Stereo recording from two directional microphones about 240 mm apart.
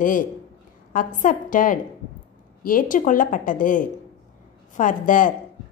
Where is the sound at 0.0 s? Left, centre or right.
Left.